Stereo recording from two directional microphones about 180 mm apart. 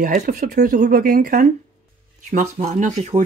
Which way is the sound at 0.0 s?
45° right (ahead or behind).